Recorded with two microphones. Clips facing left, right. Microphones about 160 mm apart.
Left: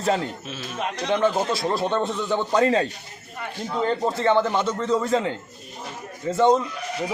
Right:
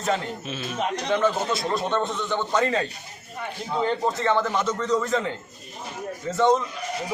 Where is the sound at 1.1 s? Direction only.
30° left (ahead or behind).